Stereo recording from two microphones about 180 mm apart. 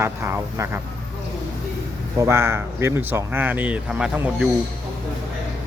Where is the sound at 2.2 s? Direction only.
15° right (ahead or behind).